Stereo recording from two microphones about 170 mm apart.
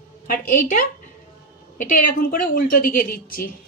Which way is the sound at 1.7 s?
50° left (ahead or behind).